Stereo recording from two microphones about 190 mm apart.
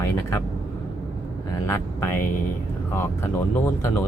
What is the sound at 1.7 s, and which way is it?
Speech, 10° left (ahead or behind).